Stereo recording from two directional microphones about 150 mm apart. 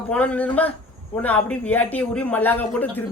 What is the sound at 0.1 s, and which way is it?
A man's voice, 10° left (ahead or behind).